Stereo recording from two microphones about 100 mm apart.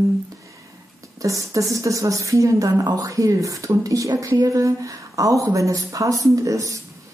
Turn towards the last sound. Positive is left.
turn(degrees=-35)  # may be behind; listen again after turning